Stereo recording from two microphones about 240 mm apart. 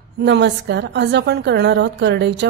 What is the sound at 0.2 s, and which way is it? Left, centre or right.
A woman's voice, right.